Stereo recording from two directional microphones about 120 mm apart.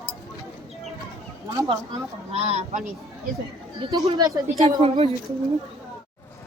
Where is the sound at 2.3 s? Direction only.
65° right (ahead or behind).